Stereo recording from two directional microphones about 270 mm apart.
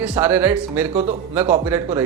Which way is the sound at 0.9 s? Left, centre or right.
Right.